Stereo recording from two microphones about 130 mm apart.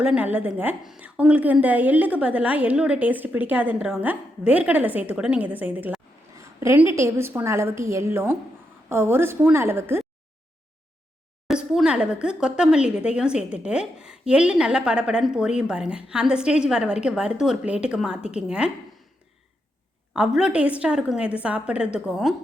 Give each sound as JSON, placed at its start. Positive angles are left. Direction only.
{"t": 0.0, "sound": "speech", "side_deg": -10}
{"t": 6.3, "sound": "a woman's voice", "side_deg": -20}
{"t": 11.4, "sound": "speech", "side_deg": -5}
{"t": 20.1, "sound": "speech", "side_deg": -5}